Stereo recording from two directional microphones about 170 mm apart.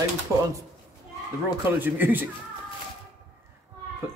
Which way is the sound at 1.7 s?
10° right (ahead or behind).